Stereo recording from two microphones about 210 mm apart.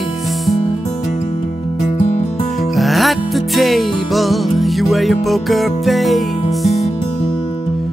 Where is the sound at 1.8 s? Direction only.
30° left (ahead or behind).